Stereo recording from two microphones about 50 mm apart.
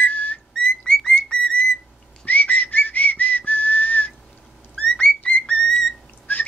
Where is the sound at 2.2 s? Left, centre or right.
Left.